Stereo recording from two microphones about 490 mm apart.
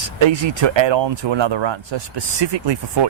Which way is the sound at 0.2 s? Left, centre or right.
Right.